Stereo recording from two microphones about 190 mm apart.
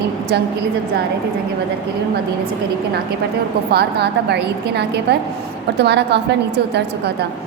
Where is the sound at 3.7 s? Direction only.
60° right (ahead or behind).